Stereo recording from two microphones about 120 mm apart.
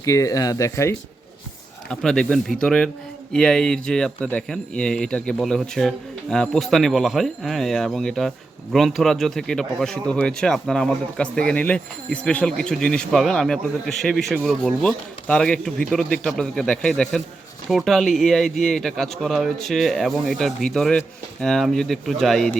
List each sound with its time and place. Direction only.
0.0 s speech: 25° left (ahead or behind)
1.9 s speech: 5° left (ahead or behind)